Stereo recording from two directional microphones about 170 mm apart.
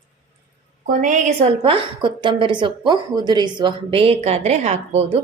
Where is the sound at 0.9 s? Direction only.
45° right (ahead or behind).